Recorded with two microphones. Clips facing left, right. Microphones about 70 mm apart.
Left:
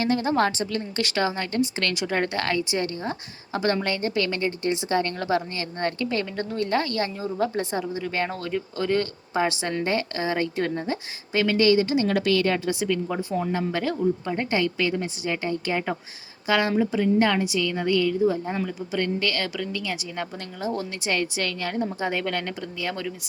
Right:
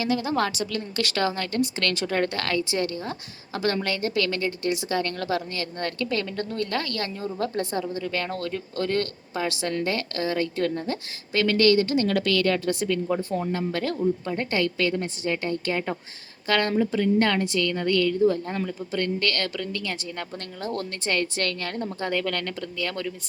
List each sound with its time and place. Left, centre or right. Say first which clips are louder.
0.0 s a woman's voice: left 2 dB; left; by 13.2 s centre
13.5 s a woman's voice: left 1 dB; left